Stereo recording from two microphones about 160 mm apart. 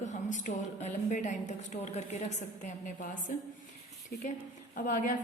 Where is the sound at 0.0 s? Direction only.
50° left (ahead or behind).